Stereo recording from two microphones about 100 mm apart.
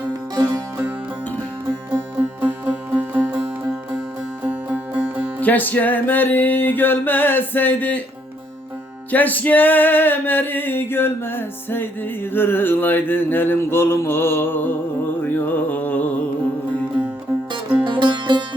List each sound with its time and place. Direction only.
0.1 s music: 35° right (ahead or behind)
1.9 s music: 20° right (ahead or behind)
5.4 s male singing: 15° left (ahead or behind)
9.1 s male singing: 15° left (ahead or behind)
15.2 s music: 20° left (ahead or behind)
17.8 s music: 50° right (ahead or behind)